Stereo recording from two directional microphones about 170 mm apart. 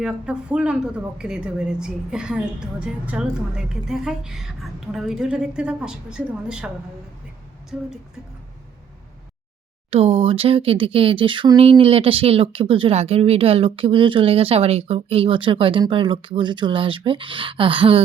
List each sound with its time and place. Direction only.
0.0 s a woman's voice: 5° right (ahead or behind)
7.7 s a woman's voice: 5° right (ahead or behind)
9.9 s speech: 35° right (ahead or behind)